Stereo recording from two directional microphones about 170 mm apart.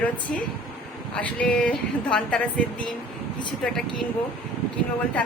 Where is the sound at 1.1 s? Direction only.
5° left (ahead or behind).